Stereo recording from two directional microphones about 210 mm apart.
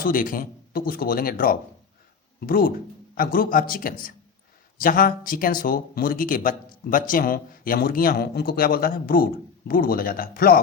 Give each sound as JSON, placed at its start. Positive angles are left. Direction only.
{"t": 0.0, "sound": "speech", "side_deg": 40}